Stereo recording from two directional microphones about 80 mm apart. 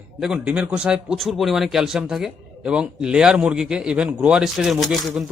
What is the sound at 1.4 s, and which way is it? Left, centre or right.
A man's voice, centre.